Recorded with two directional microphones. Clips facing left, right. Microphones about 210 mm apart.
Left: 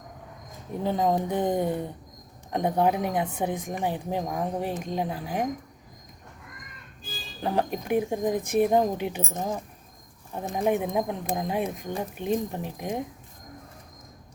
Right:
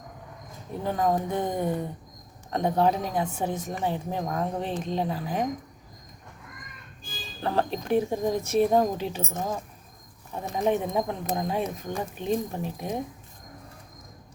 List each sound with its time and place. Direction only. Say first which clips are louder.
0.9 s speech: left 1 dB; 15° left (ahead or behind)
7.4 s speech: even; 15° left (ahead or behind)
10.6 s speech: even; 10° left (ahead or behind)